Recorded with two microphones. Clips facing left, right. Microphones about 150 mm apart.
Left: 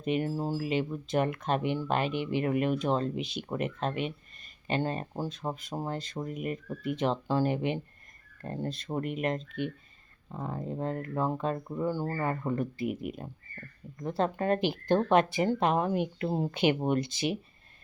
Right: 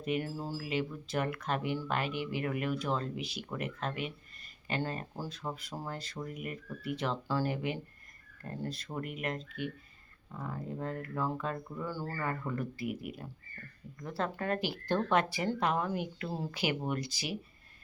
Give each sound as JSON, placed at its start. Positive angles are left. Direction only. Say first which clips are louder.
{"t": 0.0, "sound": "speech", "louder": "left 5 dB", "side_deg": 20}